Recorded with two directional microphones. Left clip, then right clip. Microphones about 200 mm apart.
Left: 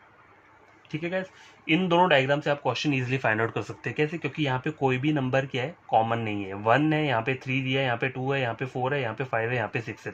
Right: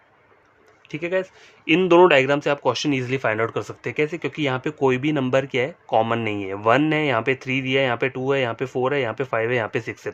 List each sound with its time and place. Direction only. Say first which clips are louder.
0.9 s speech: right 6 dB; 35° right (ahead or behind)
1.6 s speech: right 7 dB; 50° right (ahead or behind)